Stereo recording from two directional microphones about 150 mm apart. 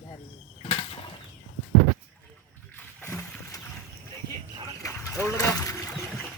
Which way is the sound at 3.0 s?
15° left (ahead or behind).